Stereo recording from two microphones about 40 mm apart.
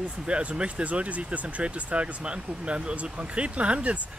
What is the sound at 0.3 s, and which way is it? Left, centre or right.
Speech, right.